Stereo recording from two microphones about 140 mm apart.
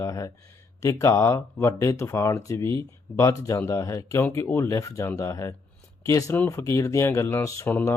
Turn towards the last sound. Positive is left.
turn(degrees=20)  # may be behind; listen again after turning